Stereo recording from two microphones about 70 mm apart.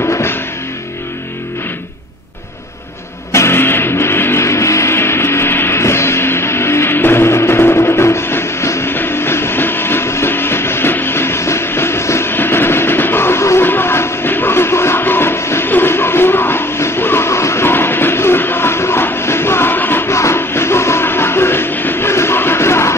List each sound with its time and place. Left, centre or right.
0.1 s music: left
3.3 s music: left
8.9 s train: left
13.7 s music: left